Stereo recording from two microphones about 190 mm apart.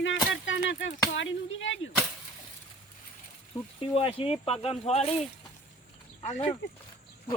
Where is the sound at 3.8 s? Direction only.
30° left (ahead or behind).